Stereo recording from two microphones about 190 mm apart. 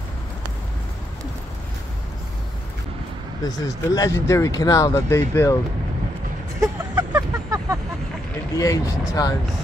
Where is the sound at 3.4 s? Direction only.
20° left (ahead or behind).